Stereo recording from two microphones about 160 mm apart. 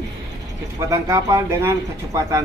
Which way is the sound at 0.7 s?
20° right (ahead or behind).